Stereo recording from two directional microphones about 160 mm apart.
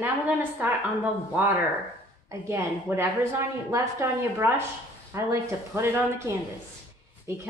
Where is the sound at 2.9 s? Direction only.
10° right (ahead or behind).